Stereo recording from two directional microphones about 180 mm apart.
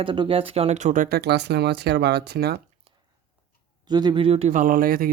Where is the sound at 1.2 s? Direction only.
70° right (ahead or behind).